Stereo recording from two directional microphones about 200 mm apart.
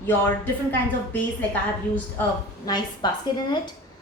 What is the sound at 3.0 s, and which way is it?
Speech, 20° left (ahead or behind).